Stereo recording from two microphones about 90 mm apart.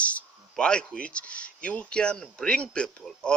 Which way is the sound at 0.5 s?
10° left (ahead or behind).